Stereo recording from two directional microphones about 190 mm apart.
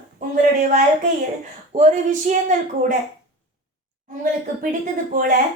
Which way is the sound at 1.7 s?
35° right (ahead or behind).